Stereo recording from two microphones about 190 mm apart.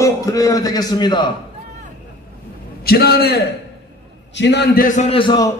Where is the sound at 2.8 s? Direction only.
55° left (ahead or behind).